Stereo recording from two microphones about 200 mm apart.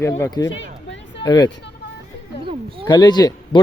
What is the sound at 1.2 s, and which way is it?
Speech, 20° left (ahead or behind).